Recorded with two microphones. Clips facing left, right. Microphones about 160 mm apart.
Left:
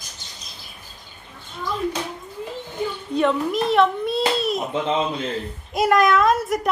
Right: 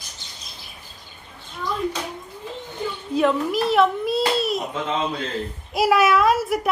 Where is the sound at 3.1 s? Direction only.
Centre (ahead or behind).